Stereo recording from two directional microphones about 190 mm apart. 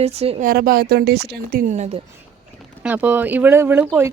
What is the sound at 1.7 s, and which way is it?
Speech, 35° right (ahead or behind).